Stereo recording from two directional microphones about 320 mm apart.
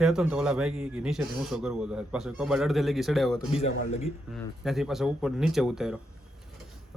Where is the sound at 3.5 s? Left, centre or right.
Centre.